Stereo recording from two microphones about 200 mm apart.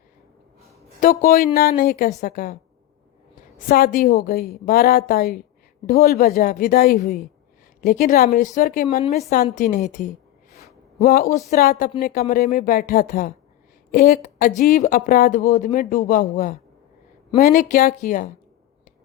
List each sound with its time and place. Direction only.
0.9 s speech: 40° left (ahead or behind)
3.7 s a woman's voice: 50° left (ahead or behind)